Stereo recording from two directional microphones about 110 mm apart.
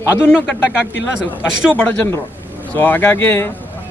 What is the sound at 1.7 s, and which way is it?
A man's voice, 15° left (ahead or behind).